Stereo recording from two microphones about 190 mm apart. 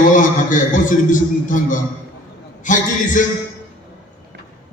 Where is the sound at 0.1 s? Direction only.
40° left (ahead or behind).